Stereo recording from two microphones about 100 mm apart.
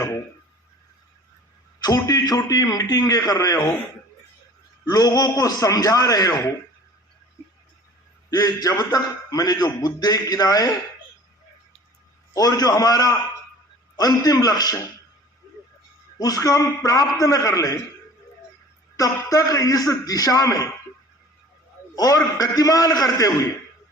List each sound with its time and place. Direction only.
1.8 s a man's voice: 40° left (ahead or behind)
4.9 s a man's voice: 40° left (ahead or behind)
8.3 s a man's voice: 40° left (ahead or behind)
12.3 s a man's voice: 35° left (ahead or behind)
16.1 s a man's voice: 35° left (ahead or behind)
18.9 s a man's voice: 35° left (ahead or behind)
21.9 s a man's voice: 35° left (ahead or behind)